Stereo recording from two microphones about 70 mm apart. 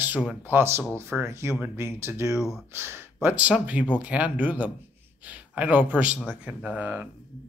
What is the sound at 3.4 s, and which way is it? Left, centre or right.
A man's voice, centre.